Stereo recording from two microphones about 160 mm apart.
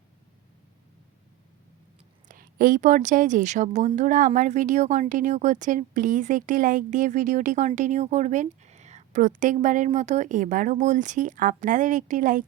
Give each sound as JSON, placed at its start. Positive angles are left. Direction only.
{"t": 2.2, "sound": "a woman's voice", "side_deg": -60}